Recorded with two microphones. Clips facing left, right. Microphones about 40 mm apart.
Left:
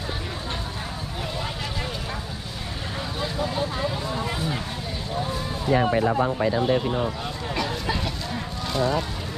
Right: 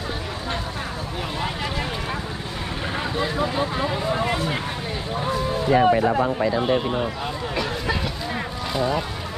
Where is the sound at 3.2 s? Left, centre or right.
Right.